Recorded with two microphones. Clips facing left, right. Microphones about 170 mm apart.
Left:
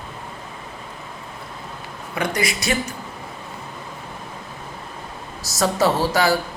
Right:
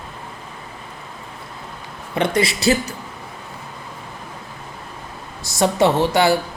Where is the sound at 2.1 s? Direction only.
30° right (ahead or behind).